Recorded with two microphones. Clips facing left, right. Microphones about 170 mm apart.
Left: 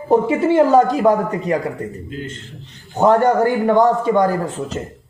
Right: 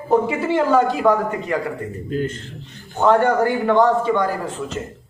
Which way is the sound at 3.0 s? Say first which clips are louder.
Left 2 dB; 40° left (ahead or behind).